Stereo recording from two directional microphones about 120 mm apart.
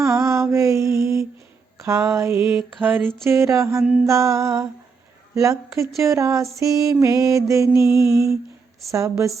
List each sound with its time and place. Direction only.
0.0 s mantra: 25° right (ahead or behind)
1.8 s music: 25° right (ahead or behind)